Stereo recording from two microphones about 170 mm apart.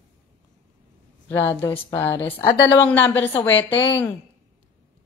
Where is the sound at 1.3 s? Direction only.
15° left (ahead or behind).